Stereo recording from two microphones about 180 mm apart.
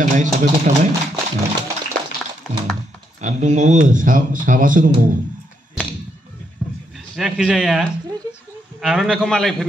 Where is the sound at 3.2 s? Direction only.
40° right (ahead or behind).